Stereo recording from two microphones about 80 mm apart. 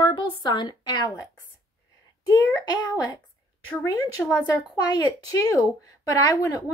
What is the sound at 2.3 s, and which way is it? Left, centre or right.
Speech, left.